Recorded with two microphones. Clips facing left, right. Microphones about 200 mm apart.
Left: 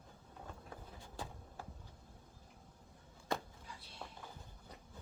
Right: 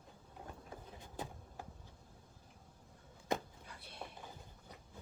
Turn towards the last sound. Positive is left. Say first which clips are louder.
# even
turn(degrees=-60)  # may be behind; listen again after turning